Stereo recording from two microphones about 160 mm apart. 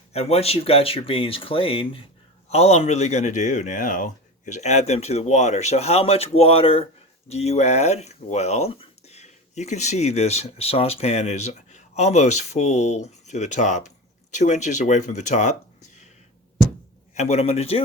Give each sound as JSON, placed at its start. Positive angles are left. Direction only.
{"t": 0.1, "sound": "speech", "side_deg": 40}
{"t": 17.2, "sound": "speech", "side_deg": 45}